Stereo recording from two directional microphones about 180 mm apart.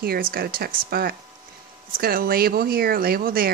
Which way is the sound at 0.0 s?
55° right (ahead or behind).